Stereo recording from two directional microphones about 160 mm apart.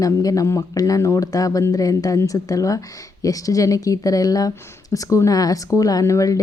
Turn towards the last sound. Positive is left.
turn(degrees=20)  # may be behind; listen again after turning